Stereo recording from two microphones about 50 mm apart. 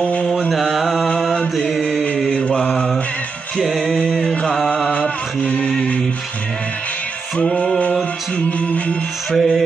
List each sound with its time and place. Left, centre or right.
0.5 s mantra: centre
2.3 s mantra: left
4.8 s music: left
7.3 s music: left
9.3 s music: centre